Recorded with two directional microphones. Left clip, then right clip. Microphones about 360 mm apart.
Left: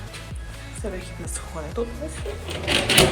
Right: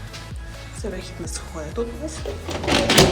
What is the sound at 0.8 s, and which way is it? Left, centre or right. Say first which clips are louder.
Speech: right 1 dB; centre.